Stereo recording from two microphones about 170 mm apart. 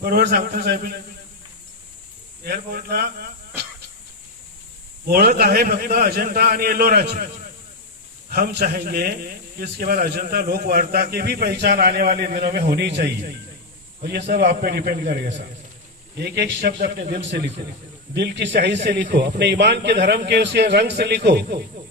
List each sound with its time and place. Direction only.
0.0 s a man's voice: 65° right (ahead or behind)
2.4 s a man's voice: 65° right (ahead or behind)
5.0 s a man's voice: 65° right (ahead or behind)
8.3 s a man's voice: 60° right (ahead or behind)
16.1 s speech: 70° right (ahead or behind); by 17.5 s 90° right
18.1 s a man's voice: 80° right
19.0 s speech: 65° right (ahead or behind)